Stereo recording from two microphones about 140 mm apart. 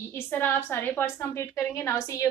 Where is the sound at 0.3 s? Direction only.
15° left (ahead or behind).